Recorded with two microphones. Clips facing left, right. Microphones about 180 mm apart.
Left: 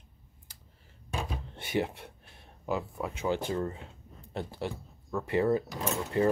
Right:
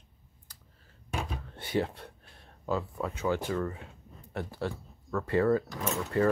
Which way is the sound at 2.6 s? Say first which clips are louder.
Right 1 dB; 15° left (ahead or behind).